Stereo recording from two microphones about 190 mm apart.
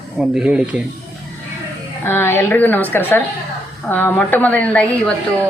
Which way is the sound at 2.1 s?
10° left (ahead or behind).